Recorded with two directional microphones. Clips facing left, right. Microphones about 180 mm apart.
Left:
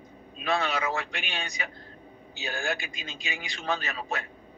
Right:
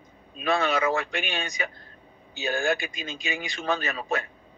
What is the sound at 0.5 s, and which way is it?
A man's voice, 55° right (ahead or behind).